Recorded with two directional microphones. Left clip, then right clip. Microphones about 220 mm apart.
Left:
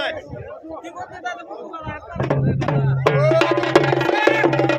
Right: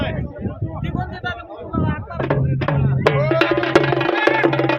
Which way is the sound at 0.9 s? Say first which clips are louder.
Right 3 dB; 35° right (ahead or behind).